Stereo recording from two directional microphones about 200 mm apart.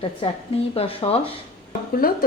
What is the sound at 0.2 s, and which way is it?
Speech, 30° left (ahead or behind).